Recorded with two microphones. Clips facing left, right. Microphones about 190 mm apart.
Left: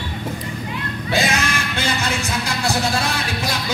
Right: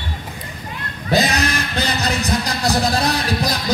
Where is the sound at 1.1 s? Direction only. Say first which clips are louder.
Right 3 dB; 35° right (ahead or behind).